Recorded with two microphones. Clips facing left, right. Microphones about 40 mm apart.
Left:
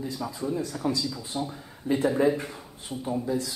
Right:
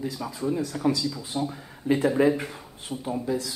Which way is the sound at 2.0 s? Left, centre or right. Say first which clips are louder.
Right 1 dB; right.